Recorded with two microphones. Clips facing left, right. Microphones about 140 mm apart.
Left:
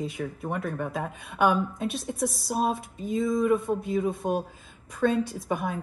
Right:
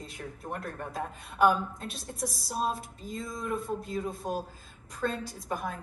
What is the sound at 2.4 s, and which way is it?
Speech, 55° left (ahead or behind).